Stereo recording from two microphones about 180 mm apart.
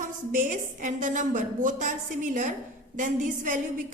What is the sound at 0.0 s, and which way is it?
A woman's voice, 45° right (ahead or behind).